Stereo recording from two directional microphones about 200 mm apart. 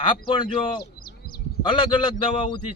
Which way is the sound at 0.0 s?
25° left (ahead or behind).